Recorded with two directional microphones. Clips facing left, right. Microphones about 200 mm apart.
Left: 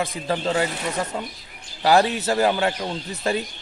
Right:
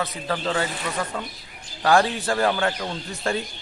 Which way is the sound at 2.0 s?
20° left (ahead or behind).